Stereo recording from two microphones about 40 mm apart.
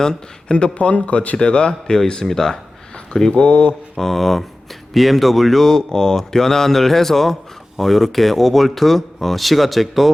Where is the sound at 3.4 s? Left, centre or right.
Left.